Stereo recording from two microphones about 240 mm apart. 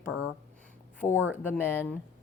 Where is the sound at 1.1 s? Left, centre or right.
Centre.